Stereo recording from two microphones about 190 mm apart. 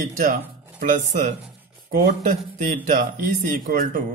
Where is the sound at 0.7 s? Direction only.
40° right (ahead or behind).